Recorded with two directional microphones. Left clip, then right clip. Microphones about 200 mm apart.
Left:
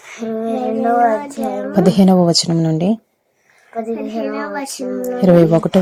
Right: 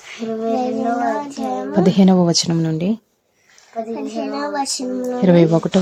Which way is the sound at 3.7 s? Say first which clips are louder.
Left 2 dB; 35° left (ahead or behind).